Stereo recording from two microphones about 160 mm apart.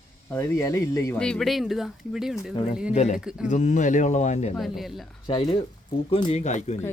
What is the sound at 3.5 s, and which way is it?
Speech, 50° left (ahead or behind).